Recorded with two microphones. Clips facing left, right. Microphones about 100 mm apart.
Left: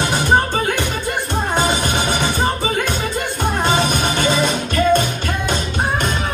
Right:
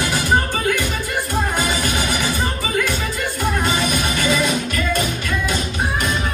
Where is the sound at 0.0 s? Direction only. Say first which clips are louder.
Left 3 dB; 25° left (ahead or behind).